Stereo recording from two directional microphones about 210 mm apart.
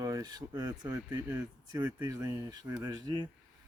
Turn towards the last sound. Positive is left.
turn(degrees=-20)  # may be behind; listen again after turning